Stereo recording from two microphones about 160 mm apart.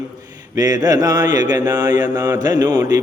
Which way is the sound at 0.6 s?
20° right (ahead or behind).